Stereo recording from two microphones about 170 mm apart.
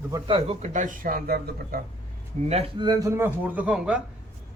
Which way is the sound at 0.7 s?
50° right (ahead or behind).